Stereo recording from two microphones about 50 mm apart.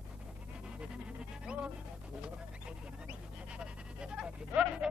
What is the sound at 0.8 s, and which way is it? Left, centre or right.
Music, centre.